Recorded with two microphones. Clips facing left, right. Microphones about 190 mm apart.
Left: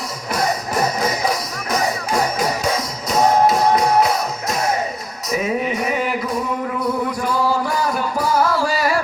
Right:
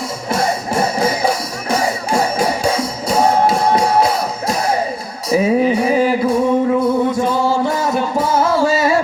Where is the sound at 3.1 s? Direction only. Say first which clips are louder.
Right 1 dB; 30° right (ahead or behind).